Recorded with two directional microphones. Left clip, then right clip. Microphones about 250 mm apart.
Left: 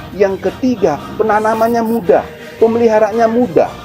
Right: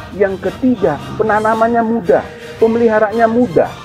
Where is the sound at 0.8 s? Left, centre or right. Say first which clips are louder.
Left 2 dB; left.